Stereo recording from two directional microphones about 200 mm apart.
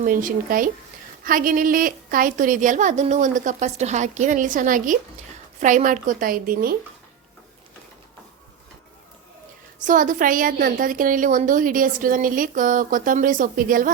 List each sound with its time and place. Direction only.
0.0 s a woman's voice: 40° right (ahead or behind)
9.8 s a woman's voice: 40° right (ahead or behind)